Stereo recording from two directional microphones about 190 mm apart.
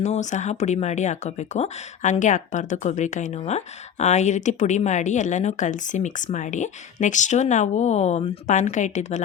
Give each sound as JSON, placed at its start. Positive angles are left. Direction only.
{"t": 0.0, "sound": "speech", "side_deg": 40}